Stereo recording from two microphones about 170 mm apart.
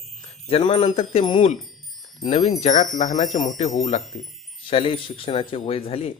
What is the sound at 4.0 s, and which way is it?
Speech, centre (ahead or behind).